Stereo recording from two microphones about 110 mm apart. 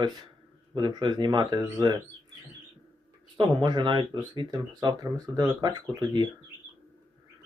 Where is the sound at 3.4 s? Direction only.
45° right (ahead or behind).